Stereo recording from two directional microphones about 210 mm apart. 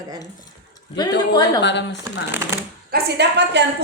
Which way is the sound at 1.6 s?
55° left (ahead or behind).